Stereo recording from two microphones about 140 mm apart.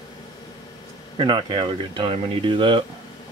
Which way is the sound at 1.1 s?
35° right (ahead or behind).